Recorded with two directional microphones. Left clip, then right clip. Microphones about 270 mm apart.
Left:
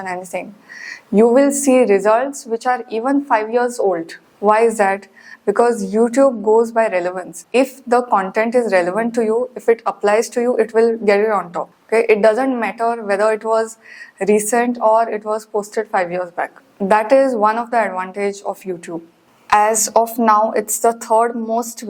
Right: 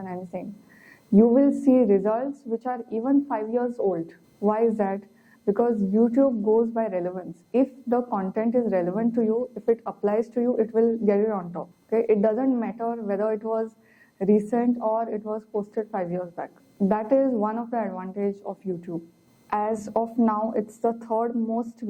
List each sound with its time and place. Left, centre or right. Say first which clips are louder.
0.0 s a woman's voice: left 10 dB; centre
6.7 s a woman's voice: left 10 dB; centre
15.6 s a woman's voice: left 10 dB; centre